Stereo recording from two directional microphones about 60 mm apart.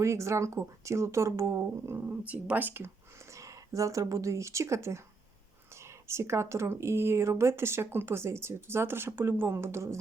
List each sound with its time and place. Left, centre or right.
0.0 s speech: right
2.0 s speech: right
3.3 s speech: right